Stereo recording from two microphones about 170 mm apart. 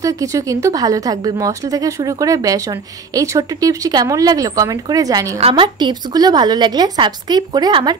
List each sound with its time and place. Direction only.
0.0 s speech: 20° right (ahead or behind)